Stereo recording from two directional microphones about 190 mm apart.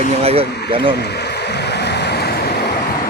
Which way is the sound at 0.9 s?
60° left (ahead or behind).